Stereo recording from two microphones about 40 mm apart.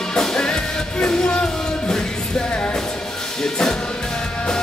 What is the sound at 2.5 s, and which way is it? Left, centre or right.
Music, left.